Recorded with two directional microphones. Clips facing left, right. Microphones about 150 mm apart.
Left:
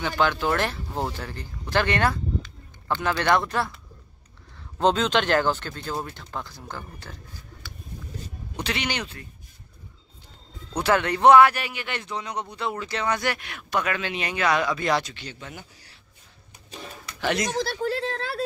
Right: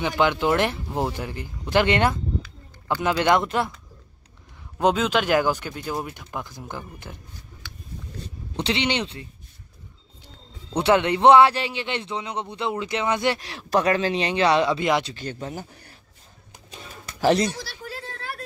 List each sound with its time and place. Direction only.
0.0 s speech: 15° right (ahead or behind)
4.7 s speech: 10° right (ahead or behind)
8.5 s a man's voice: 25° right (ahead or behind)
10.7 s a man's voice: 25° right (ahead or behind)
13.4 s speech: 35° right (ahead or behind)
15.2 s speech: 45° right (ahead or behind)
15.7 s a sound: 55° right (ahead or behind)
17.2 s speech: 35° right (ahead or behind)
17.6 s a sound: 60° left (ahead or behind); by 18.2 s 75° left (ahead or behind)